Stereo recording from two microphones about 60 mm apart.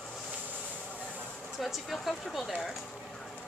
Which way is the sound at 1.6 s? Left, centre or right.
Centre.